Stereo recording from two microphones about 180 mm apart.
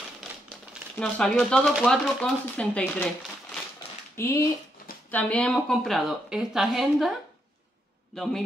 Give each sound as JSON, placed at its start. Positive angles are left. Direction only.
{"t": 0.9, "sound": "speech", "side_deg": 5}
{"t": 4.2, "sound": "speech", "side_deg": 15}